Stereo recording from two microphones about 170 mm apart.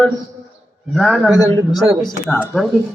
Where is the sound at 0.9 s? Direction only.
Centre (ahead or behind).